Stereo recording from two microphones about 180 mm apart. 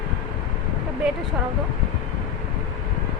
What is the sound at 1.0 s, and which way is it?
Speech, centre (ahead or behind).